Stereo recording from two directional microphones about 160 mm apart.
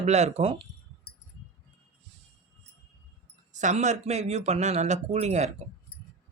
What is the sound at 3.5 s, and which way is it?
Speech, 50° right (ahead or behind).